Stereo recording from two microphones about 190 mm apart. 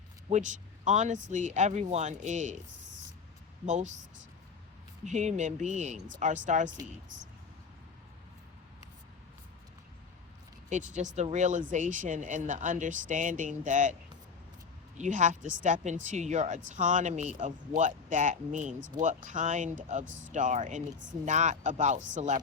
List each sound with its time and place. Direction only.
0.3 s speech: 40° right (ahead or behind)
5.0 s speech: 40° right (ahead or behind)
10.7 s speech: 40° right (ahead or behind)
14.9 s speech: 40° right (ahead or behind)
20.1 s speech: 80° right
20.3 s speech: 40° right (ahead or behind)